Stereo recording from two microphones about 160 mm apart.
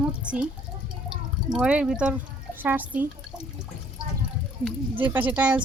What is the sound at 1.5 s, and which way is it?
Speech, 5° right (ahead or behind).